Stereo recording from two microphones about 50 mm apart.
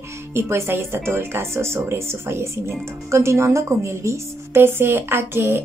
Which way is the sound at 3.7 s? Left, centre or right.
Right.